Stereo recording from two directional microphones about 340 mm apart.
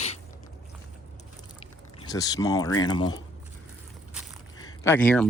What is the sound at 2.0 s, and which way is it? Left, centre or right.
Speech, centre.